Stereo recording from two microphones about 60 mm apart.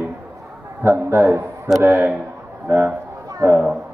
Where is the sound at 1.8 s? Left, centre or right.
Right.